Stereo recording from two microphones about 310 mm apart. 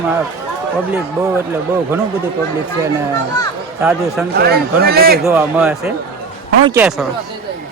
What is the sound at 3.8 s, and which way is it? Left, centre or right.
Speech, centre.